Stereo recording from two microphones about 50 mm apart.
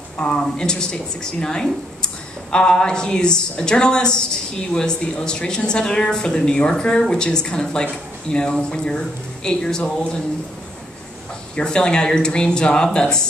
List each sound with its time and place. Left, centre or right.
0.2 s a woman's voice: centre
11.5 s a woman's voice: centre